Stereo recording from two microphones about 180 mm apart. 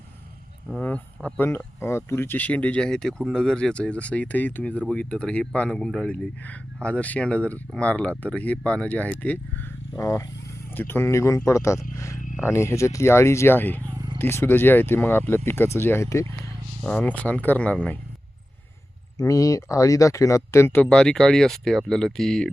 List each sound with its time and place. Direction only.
0.8 s speech: 10° left (ahead or behind)
13.8 s a sound: 20° right (ahead or behind)
14.2 s speech: 10° left (ahead or behind)
19.1 s speech: 20° left (ahead or behind); by 22.5 s 5° left (ahead or behind)